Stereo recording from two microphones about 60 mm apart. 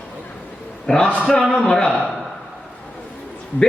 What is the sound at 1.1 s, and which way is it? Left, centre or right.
Speech, left.